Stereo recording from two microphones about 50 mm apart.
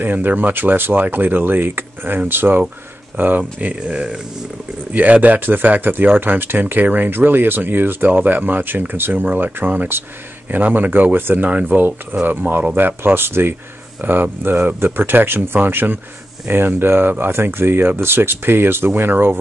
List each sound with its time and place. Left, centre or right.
0.0 s speech: right
3.8 s speech: right
4.9 s speech: right